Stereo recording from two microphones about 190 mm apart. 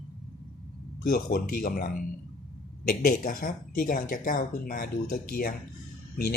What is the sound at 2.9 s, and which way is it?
Speech, 45° left (ahead or behind).